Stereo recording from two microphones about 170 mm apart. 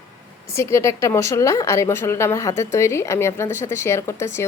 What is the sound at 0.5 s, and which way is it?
Speech, 15° left (ahead or behind).